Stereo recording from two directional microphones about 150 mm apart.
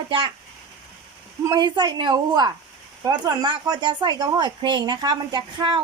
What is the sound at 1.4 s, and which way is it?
Speech, 30° right (ahead or behind).